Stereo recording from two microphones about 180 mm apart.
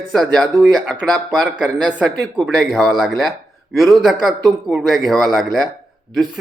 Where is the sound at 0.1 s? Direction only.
Centre (ahead or behind).